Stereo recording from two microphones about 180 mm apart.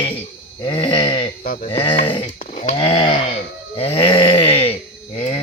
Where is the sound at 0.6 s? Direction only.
25° left (ahead or behind).